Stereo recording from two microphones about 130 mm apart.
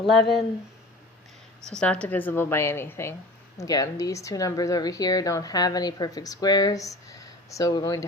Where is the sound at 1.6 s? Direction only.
5° left (ahead or behind).